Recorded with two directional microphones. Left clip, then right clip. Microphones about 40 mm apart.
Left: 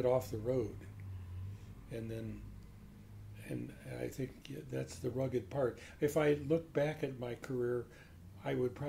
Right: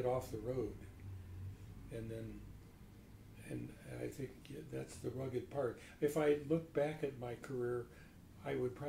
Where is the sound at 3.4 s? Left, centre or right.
Left.